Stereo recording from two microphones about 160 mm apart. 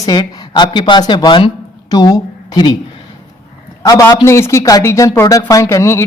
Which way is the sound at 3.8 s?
20° left (ahead or behind).